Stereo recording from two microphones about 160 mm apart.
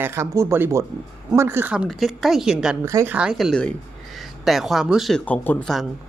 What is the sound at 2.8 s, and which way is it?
Speech, 20° right (ahead or behind).